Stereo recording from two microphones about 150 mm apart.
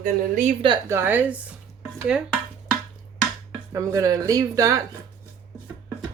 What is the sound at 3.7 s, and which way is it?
Speech, 20° right (ahead or behind).